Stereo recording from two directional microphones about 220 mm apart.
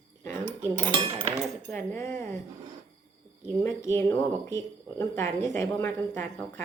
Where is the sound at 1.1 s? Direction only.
25° right (ahead or behind).